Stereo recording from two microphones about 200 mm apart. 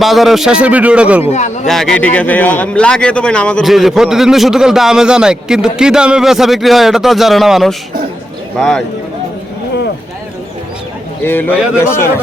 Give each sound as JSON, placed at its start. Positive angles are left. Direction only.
{"t": 0.0, "sound": "a man's voice", "side_deg": 0}
{"t": 1.2, "sound": "speech", "side_deg": 35}
{"t": 1.6, "sound": "a man's voice", "side_deg": 0}
{"t": 11.2, "sound": "a man's voice", "side_deg": 10}